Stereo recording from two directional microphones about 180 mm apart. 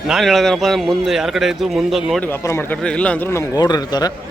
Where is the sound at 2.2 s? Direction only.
15° left (ahead or behind).